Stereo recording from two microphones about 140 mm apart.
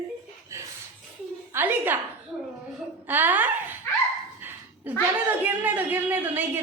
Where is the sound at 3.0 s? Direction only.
15° right (ahead or behind).